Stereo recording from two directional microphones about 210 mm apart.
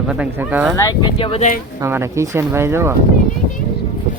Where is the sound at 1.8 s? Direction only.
15° right (ahead or behind).